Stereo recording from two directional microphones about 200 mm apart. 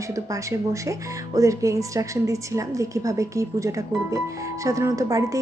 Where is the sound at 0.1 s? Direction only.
15° right (ahead or behind).